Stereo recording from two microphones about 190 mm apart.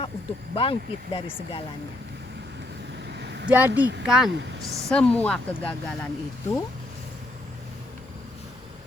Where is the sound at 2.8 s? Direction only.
65° right (ahead or behind).